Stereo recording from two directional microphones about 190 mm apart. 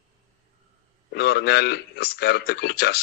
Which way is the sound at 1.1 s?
60° left (ahead or behind).